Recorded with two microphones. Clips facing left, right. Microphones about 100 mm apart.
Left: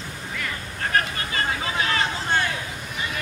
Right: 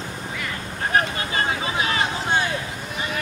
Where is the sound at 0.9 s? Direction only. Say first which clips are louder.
Right 3 dB; 20° right (ahead or behind).